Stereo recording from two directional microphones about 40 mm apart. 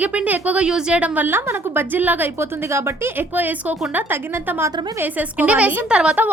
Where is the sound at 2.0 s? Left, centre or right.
Right.